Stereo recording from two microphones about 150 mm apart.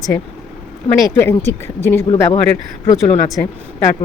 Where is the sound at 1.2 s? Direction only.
15° left (ahead or behind).